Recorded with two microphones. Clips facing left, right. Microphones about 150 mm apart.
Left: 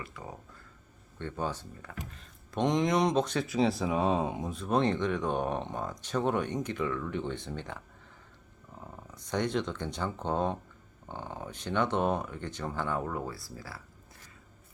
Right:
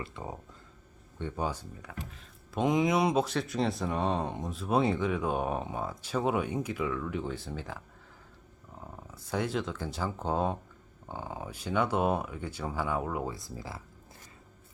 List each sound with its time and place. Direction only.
0.0 s speech: 25° right (ahead or behind)
1.2 s speech: 10° right (ahead or behind)
8.8 s speech: 5° right (ahead or behind); by 13.8 s 20° right (ahead or behind)